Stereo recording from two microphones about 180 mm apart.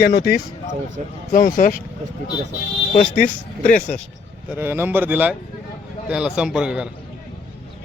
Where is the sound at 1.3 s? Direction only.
50° left (ahead or behind).